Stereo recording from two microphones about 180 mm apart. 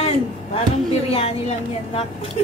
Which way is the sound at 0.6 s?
35° left (ahead or behind).